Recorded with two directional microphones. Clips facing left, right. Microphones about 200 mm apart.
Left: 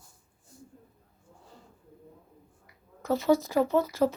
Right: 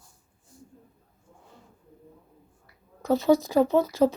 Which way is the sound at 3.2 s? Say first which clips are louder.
Right 3 dB; 15° right (ahead or behind).